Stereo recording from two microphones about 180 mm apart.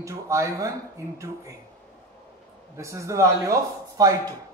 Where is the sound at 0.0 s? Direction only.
15° right (ahead or behind).